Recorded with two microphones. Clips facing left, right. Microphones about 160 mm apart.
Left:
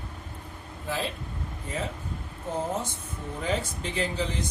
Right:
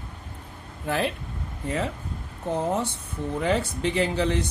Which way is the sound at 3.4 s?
70° right (ahead or behind).